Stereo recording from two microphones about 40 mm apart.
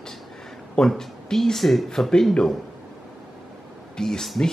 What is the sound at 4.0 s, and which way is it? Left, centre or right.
Speech, centre.